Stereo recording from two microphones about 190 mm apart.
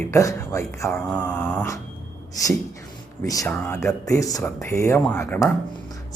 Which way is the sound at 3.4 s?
5° left (ahead or behind).